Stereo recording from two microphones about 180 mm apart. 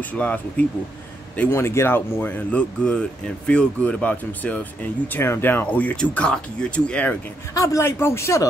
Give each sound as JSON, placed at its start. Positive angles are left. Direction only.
{"t": 0.1, "sound": "speech", "side_deg": 5}
{"t": 7.5, "sound": "speech", "side_deg": 20}